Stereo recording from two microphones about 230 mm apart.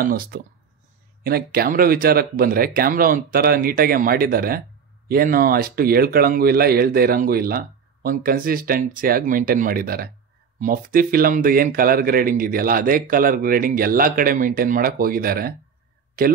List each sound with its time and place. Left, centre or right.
0.0 s speech: right